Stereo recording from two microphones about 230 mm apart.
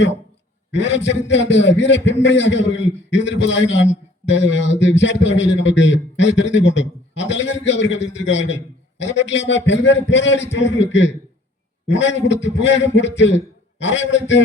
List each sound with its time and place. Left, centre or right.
0.7 s a man's voice: left